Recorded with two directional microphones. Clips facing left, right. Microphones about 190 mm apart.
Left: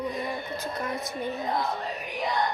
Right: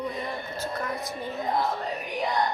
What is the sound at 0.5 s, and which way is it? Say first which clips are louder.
Speech: even; 20° left (ahead or behind).